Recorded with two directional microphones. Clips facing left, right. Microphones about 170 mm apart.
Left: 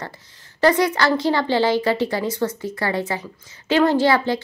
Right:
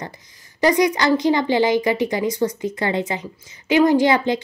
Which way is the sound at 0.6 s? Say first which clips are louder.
Even; 15° right (ahead or behind).